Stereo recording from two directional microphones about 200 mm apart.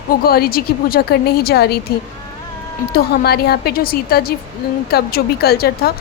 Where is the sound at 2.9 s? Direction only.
50° left (ahead or behind).